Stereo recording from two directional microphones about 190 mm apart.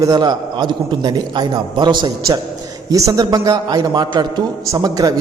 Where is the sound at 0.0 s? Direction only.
20° right (ahead or behind).